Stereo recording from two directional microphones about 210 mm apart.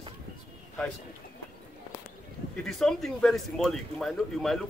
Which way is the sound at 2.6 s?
Centre (ahead or behind).